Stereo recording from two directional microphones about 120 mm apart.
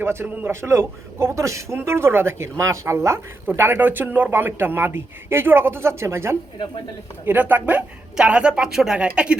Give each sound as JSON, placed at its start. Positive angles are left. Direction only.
{"t": 0.0, "sound": "a man's voice", "side_deg": -20}